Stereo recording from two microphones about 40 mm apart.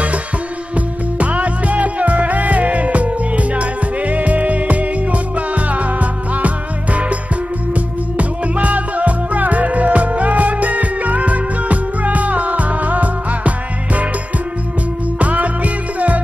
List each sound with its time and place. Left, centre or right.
0.7 s music: right
15.1 s music: right